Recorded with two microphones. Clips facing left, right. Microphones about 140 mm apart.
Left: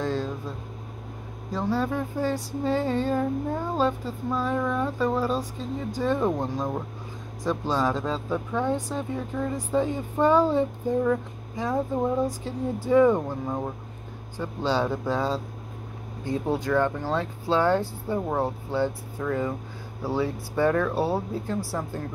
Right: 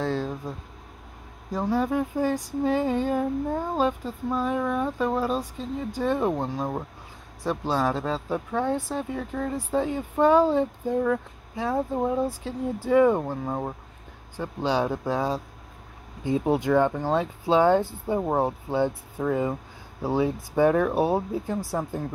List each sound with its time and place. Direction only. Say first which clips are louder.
0.0 s vehicle: right 1 dB; 10° right (ahead or behind)
1.5 s speech: right 2 dB; 15° right (ahead or behind)
5.4 s speech: even; 10° left (ahead or behind)
6.0 s speech: even; 5° right (ahead or behind)